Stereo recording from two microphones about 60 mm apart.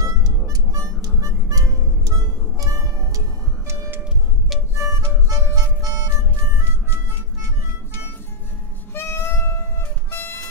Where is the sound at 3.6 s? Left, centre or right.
Right.